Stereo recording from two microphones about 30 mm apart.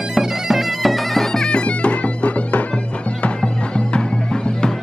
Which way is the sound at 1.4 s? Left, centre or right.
Left.